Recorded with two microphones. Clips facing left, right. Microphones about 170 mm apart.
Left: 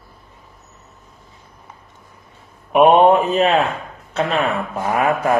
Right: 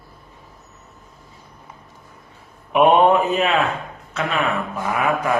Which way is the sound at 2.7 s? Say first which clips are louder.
Left 3 dB; 25° left (ahead or behind).